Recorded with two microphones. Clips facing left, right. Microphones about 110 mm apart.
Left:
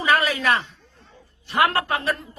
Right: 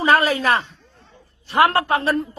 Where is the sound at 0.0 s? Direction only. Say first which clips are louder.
Right 4 dB; 35° right (ahead or behind).